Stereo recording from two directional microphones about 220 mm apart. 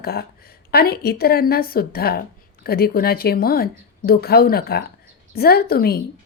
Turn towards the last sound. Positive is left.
turn(degrees=45)  # may be behind; listen again after turning